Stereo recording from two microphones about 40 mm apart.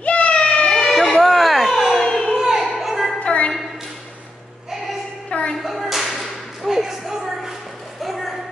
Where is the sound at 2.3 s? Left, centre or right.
Centre.